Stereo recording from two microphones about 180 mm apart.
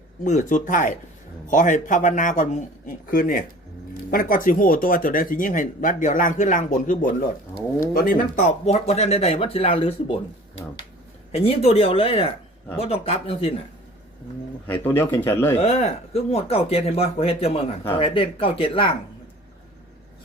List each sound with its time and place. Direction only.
0.3 s speech: 45° left (ahead or behind)
11.3 s speech: 35° left (ahead or behind)
14.7 s speech: 10° left (ahead or behind)
15.5 s speech: 35° left (ahead or behind)